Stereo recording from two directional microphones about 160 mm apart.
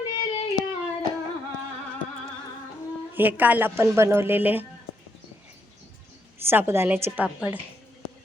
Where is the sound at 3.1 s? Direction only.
10° right (ahead or behind).